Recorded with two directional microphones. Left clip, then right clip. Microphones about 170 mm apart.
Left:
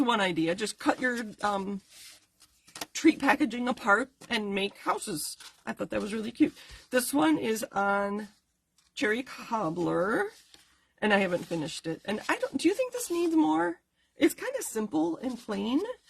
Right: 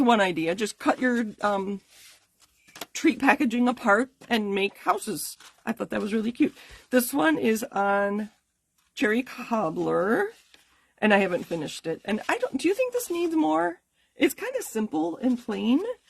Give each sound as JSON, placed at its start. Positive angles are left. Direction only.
{"t": 0.0, "sound": "speech", "side_deg": -50}
{"t": 2.9, "sound": "speech", "side_deg": -45}
{"t": 11.3, "sound": "speech", "side_deg": 0}
{"t": 11.6, "sound": "speech", "side_deg": -50}